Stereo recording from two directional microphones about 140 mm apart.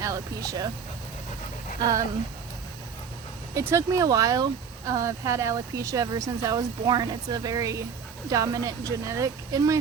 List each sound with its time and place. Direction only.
0.0 s speech: 25° right (ahead or behind)
1.8 s speech: 25° right (ahead or behind)
3.5 s speech: 20° right (ahead or behind)